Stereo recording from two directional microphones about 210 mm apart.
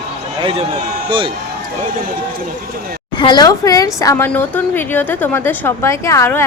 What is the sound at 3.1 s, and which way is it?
A woman's voice, 20° left (ahead or behind).